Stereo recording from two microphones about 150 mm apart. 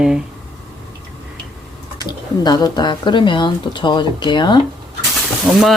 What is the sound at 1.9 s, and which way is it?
Speech, 25° left (ahead or behind).